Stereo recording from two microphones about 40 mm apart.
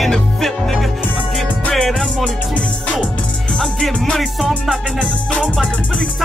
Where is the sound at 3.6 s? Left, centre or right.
Centre.